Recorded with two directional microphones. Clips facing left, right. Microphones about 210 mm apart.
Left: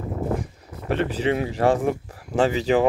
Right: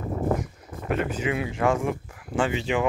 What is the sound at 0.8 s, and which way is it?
Speech, 35° left (ahead or behind).